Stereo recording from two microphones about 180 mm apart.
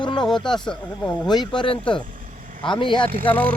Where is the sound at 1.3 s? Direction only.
25° left (ahead or behind).